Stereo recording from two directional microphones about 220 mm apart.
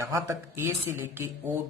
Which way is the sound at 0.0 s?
15° right (ahead or behind).